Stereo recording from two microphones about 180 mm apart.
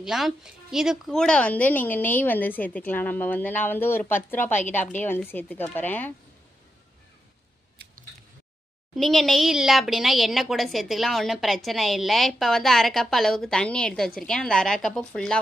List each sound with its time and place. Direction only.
0.0 s a woman's voice: centre (ahead or behind)
8.9 s a woman's voice: centre (ahead or behind)